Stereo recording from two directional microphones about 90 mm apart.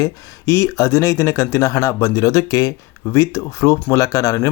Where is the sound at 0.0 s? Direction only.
35° left (ahead or behind).